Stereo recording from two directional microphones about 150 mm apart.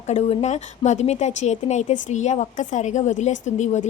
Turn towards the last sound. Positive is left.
turn(degrees=50)  # may be behind; listen again after turning